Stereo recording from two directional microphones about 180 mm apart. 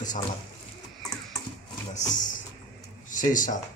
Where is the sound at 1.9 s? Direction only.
45° left (ahead or behind).